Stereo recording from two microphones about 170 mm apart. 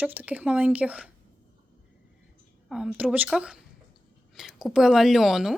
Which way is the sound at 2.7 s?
5° right (ahead or behind).